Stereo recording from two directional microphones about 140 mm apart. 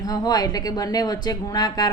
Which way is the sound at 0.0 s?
25° left (ahead or behind).